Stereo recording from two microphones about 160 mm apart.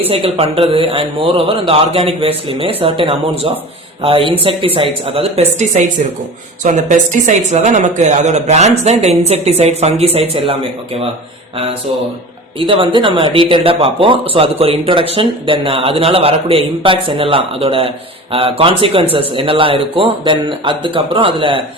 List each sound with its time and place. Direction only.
0.1 s speech: 35° right (ahead or behind)
12.5 s speech: 35° right (ahead or behind)